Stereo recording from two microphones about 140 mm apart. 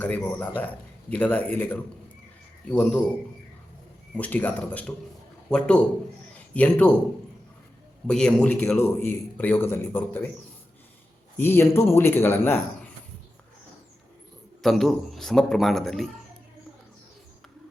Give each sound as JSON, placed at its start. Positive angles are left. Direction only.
{"t": 0.0, "sound": "a man's voice", "side_deg": 10}
{"t": 4.2, "sound": "a man's voice", "side_deg": 10}
{"t": 6.3, "sound": "a sound", "side_deg": 10}
{"t": 8.0, "sound": "a man's voice", "side_deg": 5}
{"t": 11.3, "sound": "a man's voice", "side_deg": 15}
{"t": 14.6, "sound": "a man's voice", "side_deg": 0}